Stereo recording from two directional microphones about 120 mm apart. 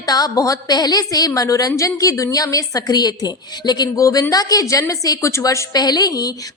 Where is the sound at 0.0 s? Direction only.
30° left (ahead or behind).